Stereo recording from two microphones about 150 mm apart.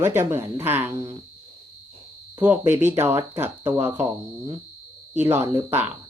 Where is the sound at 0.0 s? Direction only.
15° right (ahead or behind).